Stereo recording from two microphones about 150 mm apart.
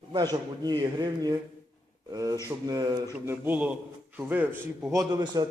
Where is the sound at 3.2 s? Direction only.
15° right (ahead or behind).